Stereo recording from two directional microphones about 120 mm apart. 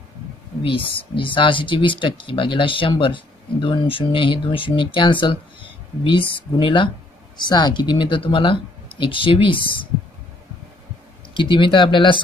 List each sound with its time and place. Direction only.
0.6 s speech: 50° left (ahead or behind)
11.3 s speech: 40° left (ahead or behind)